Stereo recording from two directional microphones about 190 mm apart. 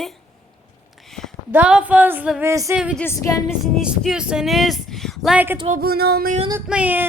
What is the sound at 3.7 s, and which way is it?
Speech, centre (ahead or behind).